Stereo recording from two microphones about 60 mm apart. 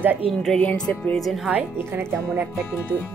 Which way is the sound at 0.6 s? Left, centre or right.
Left.